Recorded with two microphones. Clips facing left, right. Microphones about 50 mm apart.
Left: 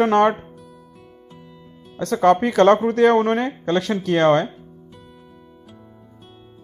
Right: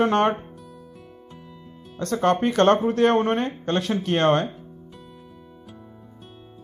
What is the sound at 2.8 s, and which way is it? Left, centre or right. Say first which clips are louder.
Speech: left 4 dB; left.